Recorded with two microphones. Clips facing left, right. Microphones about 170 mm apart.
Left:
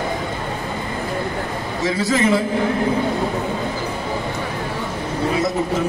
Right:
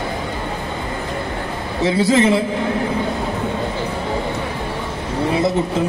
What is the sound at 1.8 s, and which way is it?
Speech, 30° right (ahead or behind).